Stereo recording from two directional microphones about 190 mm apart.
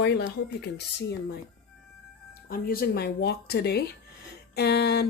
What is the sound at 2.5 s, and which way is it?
Speech, 50° left (ahead or behind).